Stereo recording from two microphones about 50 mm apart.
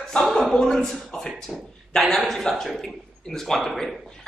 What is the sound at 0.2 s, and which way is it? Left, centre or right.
A man's voice, centre.